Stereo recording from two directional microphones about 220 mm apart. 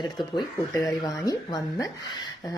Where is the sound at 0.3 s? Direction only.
15° left (ahead or behind).